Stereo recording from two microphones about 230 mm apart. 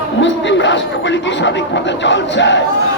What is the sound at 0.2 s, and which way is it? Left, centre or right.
Speech, left.